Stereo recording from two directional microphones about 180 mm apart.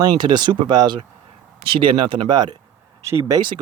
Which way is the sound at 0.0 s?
25° right (ahead or behind).